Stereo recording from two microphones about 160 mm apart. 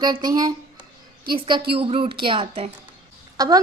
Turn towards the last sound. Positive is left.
turn(degrees=-25)  # may be behind; listen again after turning